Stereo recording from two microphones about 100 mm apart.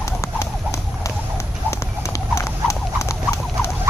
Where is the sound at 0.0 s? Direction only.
30° left (ahead or behind).